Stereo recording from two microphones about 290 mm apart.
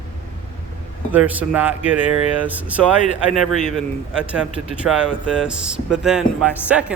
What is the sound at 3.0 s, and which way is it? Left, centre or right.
Speech, left.